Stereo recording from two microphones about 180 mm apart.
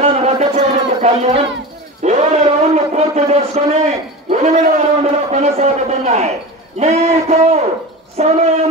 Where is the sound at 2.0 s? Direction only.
40° right (ahead or behind).